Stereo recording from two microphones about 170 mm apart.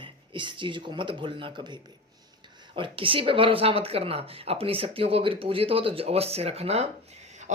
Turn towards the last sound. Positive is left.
turn(degrees=-40)  # may be behind; listen again after turning